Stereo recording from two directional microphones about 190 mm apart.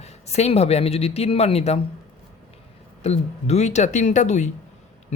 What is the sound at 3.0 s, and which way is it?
Speech, 35° left (ahead or behind).